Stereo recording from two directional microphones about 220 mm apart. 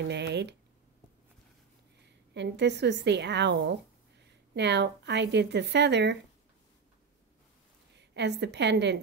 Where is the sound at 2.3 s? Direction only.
50° right (ahead or behind).